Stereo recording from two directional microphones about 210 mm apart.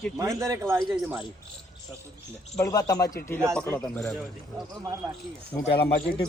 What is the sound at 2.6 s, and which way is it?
A man's voice, 15° left (ahead or behind).